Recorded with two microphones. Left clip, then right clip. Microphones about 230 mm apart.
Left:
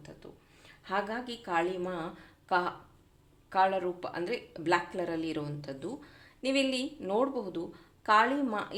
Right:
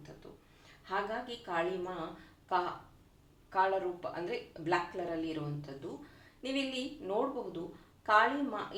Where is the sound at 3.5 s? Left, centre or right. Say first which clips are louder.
Left 3 dB; left.